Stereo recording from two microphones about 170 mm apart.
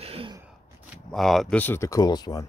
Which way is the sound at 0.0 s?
35° right (ahead or behind).